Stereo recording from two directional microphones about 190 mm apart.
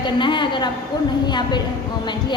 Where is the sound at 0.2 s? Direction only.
25° left (ahead or behind).